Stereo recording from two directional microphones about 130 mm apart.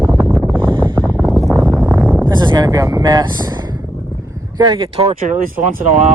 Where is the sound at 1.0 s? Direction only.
5° right (ahead or behind).